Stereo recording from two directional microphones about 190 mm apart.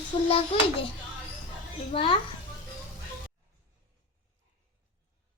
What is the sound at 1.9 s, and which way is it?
Speech, 25° left (ahead or behind).